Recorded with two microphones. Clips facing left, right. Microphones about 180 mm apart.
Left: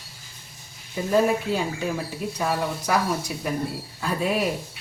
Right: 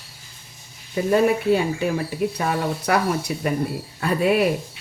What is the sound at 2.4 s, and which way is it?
Speech, 60° right (ahead or behind).